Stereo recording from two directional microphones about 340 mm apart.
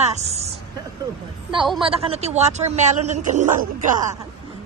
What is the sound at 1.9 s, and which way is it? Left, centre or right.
A man's voice, centre.